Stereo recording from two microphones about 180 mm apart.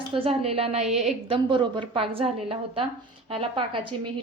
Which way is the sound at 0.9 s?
Centre (ahead or behind).